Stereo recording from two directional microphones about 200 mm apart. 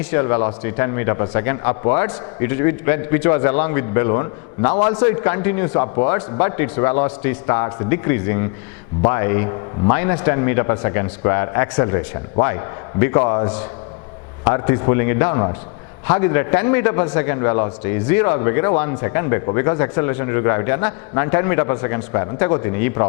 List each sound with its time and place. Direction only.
0.1 s a man's voice: 15° left (ahead or behind)